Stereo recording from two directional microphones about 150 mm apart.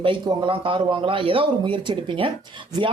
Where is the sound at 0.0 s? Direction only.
35° right (ahead or behind).